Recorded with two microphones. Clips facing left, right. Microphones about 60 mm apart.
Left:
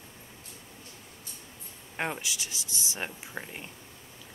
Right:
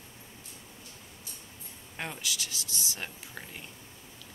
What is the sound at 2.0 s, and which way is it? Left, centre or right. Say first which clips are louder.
A woman's voice: left 4 dB; left.